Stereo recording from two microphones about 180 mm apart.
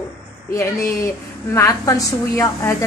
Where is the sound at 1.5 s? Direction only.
20° left (ahead or behind).